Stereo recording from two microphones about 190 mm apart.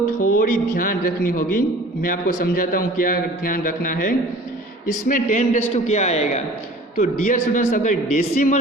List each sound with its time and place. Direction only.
0.3 s a man's voice: 45° left (ahead or behind)